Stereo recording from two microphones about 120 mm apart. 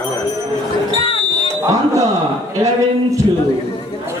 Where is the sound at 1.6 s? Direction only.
25° right (ahead or behind).